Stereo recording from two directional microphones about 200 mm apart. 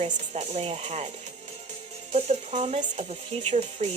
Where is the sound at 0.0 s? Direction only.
30° right (ahead or behind).